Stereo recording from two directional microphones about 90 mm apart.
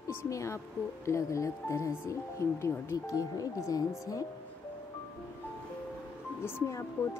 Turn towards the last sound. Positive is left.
turn(degrees=30)  # may be behind; listen again after turning